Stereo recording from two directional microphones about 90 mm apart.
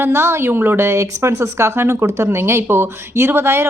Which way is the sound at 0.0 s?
30° right (ahead or behind).